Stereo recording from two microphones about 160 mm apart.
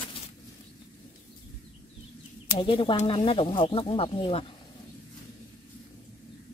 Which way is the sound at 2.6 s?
35° left (ahead or behind).